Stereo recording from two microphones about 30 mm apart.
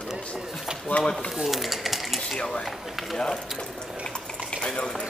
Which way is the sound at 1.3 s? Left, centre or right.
Centre.